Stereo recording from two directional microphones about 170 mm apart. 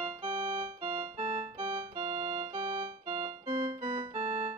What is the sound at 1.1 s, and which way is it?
Organ, 35° right (ahead or behind).